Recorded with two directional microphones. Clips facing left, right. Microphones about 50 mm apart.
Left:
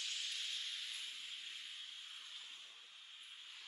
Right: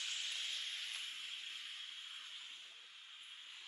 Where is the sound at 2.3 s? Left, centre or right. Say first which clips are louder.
Right 1 dB; right.